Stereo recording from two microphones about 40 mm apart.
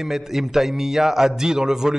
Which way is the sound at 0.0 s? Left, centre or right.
Centre.